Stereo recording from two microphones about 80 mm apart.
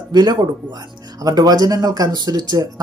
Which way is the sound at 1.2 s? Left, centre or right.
Right.